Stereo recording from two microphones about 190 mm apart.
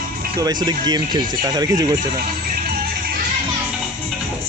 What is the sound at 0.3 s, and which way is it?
Speech, 20° right (ahead or behind).